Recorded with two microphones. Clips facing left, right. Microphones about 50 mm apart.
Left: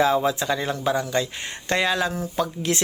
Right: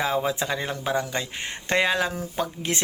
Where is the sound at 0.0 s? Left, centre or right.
Right.